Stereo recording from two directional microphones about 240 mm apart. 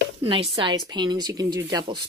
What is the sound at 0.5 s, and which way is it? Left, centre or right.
A woman's voice, centre.